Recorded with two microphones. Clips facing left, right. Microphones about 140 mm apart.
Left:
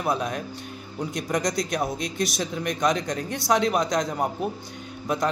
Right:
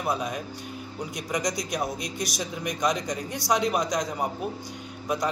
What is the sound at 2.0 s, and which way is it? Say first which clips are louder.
A man's voice: left 4 dB; 60° left (ahead or behind).